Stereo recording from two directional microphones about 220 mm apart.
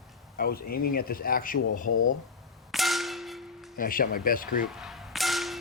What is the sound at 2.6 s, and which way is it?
Clang, centre (ahead or behind).